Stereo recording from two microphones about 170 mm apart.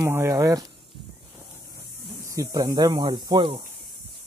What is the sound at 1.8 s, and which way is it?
Speech, 20° right (ahead or behind).